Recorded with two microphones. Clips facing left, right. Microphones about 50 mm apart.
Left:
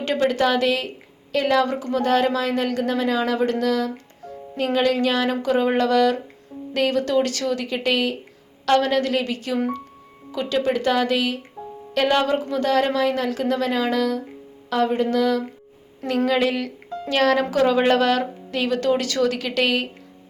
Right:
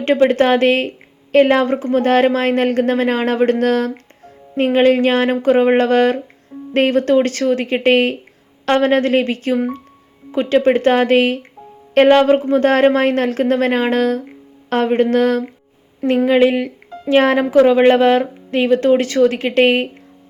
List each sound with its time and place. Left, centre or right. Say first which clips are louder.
0.3 s a woman's voice: right 6 dB; right
16.0 s speech: right 7 dB; right